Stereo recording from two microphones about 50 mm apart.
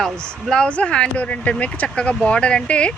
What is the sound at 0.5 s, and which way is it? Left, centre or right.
Speech, left.